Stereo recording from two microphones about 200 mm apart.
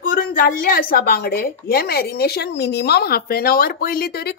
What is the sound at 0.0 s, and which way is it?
A woman's voice, 45° left (ahead or behind).